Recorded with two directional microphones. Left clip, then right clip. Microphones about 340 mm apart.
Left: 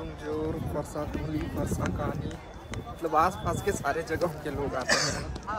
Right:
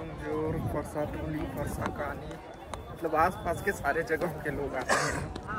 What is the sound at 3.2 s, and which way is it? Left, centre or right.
A man's voice, centre.